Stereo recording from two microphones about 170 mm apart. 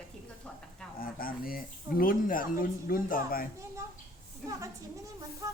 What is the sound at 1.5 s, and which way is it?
Speech, 55° left (ahead or behind).